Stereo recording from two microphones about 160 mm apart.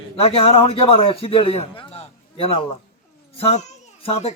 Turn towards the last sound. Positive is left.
turn(degrees=45)  # may be behind; listen again after turning